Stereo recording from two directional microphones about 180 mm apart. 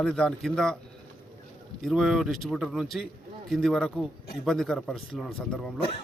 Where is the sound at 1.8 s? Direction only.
Centre (ahead or behind).